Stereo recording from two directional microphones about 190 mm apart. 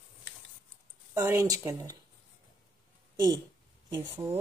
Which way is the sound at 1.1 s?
15° right (ahead or behind).